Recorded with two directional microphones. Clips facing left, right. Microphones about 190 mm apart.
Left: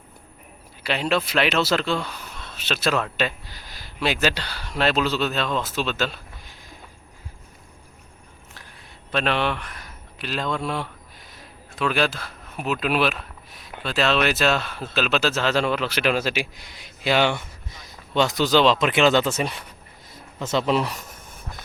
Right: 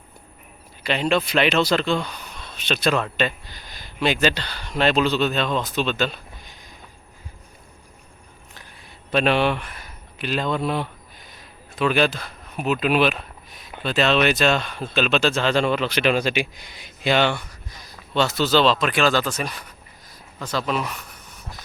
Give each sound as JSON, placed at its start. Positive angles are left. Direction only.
{"t": 0.8, "sound": "speech", "side_deg": 5}
{"t": 9.1, "sound": "speech", "side_deg": -10}
{"t": 17.3, "sound": "speech", "side_deg": 25}